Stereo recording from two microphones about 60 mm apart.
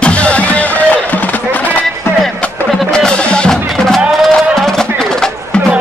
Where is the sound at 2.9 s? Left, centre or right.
Centre.